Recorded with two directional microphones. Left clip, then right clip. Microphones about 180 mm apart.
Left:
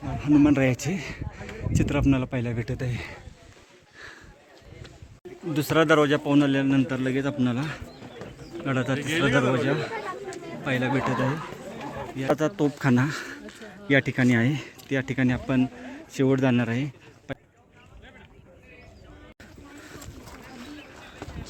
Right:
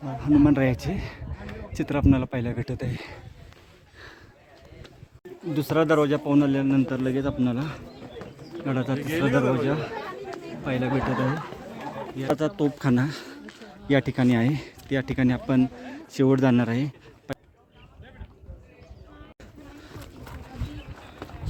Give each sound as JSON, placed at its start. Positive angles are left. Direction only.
{"t": 0.0, "sound": "speech", "side_deg": -5}
{"t": 5.5, "sound": "a man's voice", "side_deg": 0}
{"t": 9.0, "sound": "a man's voice", "side_deg": -45}
{"t": 9.5, "sound": "a man's voice", "side_deg": -10}
{"t": 12.2, "sound": "speech", "side_deg": 0}